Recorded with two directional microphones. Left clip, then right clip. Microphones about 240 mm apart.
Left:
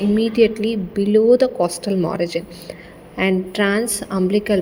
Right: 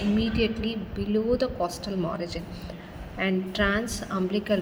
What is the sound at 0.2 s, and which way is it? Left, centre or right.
A woman's voice, left.